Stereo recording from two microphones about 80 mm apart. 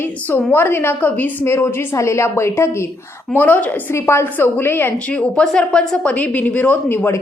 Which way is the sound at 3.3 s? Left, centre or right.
Left.